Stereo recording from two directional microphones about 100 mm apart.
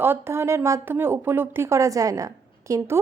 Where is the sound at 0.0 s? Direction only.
25° right (ahead or behind).